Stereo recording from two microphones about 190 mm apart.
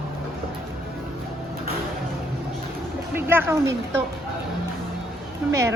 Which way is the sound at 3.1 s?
10° right (ahead or behind).